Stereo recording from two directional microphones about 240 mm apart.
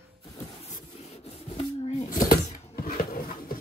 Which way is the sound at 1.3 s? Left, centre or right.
Left.